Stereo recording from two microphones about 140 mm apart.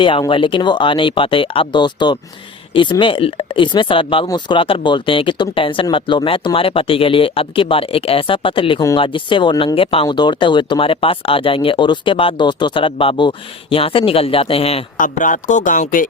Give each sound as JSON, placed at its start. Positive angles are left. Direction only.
{"t": 0.0, "sound": "speech", "side_deg": 35}
{"t": 14.9, "sound": "speech", "side_deg": 70}